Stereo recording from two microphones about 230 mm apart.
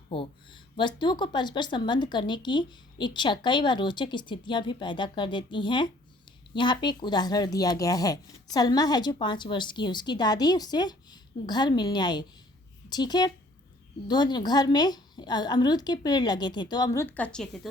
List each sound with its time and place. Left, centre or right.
0.1 s speech: left; by 17.7 s centre